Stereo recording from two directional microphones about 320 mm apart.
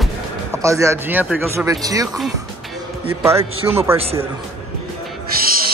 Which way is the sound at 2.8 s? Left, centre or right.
Centre.